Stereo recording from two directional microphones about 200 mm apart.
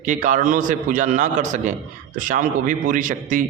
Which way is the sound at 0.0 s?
40° right (ahead or behind).